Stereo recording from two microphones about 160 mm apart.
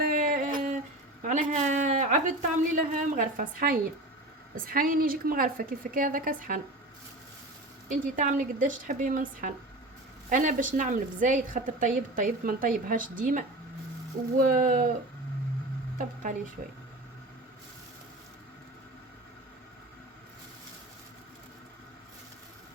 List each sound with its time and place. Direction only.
0.0 s a sound: 65° right (ahead or behind)
1.2 s a woman's voice: 50° right (ahead or behind)
7.9 s a woman's voice: 55° right (ahead or behind)